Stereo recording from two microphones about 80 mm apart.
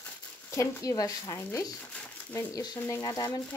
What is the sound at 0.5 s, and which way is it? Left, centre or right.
Speech, left.